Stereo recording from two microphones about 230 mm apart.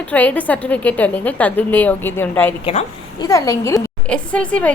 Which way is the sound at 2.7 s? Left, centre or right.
Left.